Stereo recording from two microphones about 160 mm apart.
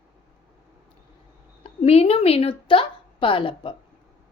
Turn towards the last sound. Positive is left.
turn(degrees=35)  # may be behind; listen again after turning